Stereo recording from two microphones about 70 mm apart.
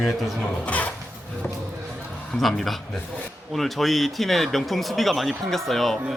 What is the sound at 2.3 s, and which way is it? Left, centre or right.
Speech, centre.